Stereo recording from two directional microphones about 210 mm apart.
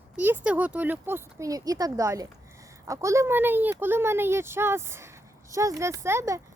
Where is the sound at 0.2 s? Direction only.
10° right (ahead or behind).